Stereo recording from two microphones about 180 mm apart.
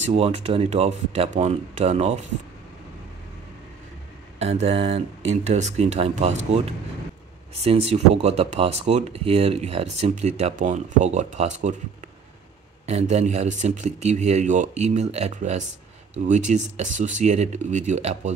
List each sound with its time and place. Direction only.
0.0 s speech: 35° right (ahead or behind)
4.4 s speech: 35° right (ahead or behind)
7.6 s speech: 35° right (ahead or behind)
12.8 s speech: 40° right (ahead or behind)